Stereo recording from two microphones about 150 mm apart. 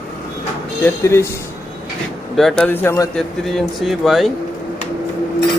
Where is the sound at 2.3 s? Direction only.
Centre (ahead or behind).